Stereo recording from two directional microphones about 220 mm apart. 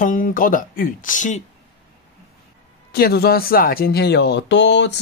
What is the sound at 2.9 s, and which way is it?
Speech, 45° left (ahead or behind).